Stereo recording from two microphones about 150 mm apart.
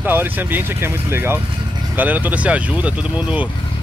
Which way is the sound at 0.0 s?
15° right (ahead or behind).